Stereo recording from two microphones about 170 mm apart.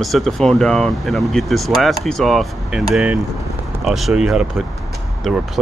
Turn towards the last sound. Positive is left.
turn(degrees=0)  # may be behind; listen again after turning